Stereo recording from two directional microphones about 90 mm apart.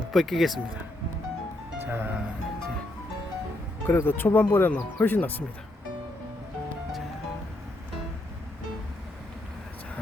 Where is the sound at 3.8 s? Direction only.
25° left (ahead or behind).